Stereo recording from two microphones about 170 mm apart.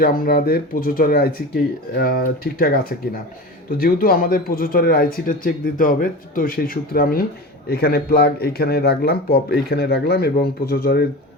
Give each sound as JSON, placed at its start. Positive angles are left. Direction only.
{"t": 0.0, "sound": "speech", "side_deg": 60}